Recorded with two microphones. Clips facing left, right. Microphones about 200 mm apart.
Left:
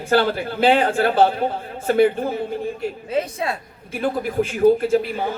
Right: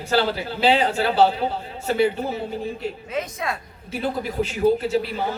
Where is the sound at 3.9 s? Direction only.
50° left (ahead or behind).